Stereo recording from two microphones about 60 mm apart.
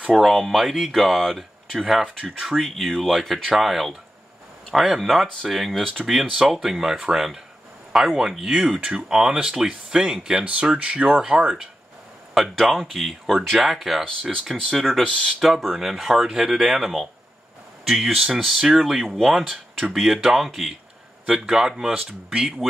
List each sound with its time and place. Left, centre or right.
0.1 s speech: centre
14.0 s speech: centre
15.0 s speech: centre
15.4 s speech: centre